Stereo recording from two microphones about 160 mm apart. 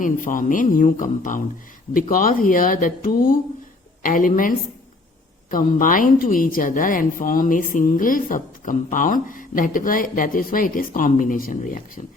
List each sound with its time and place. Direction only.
0.0 s a woman's voice: 55° left (ahead or behind)